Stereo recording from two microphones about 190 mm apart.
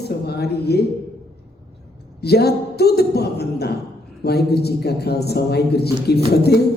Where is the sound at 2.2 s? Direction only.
55° left (ahead or behind).